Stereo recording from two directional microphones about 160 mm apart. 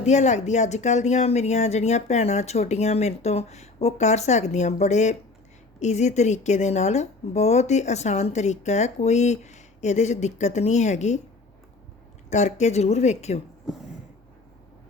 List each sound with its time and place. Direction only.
0.0 s speech: 45° left (ahead or behind)
12.3 s speech: 50° left (ahead or behind)